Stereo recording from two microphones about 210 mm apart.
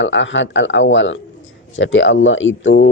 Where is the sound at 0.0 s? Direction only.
60° left (ahead or behind).